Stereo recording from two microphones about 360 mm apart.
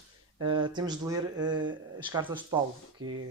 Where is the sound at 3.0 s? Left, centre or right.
Right.